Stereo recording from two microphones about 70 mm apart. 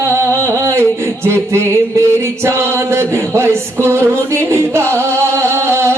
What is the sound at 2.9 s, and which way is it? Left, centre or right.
Speech, right.